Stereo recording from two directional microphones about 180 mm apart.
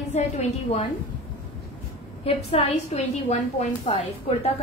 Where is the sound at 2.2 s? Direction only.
35° left (ahead or behind).